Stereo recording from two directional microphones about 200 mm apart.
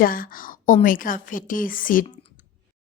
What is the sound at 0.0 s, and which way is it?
A woman's voice, 45° left (ahead or behind).